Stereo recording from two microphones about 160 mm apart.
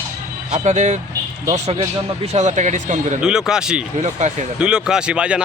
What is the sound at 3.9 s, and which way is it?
Speech, 45° right (ahead or behind).